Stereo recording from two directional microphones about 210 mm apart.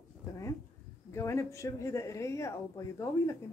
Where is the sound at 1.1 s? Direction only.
15° left (ahead or behind).